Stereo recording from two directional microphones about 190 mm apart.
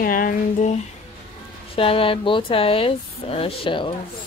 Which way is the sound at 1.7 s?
30° left (ahead or behind).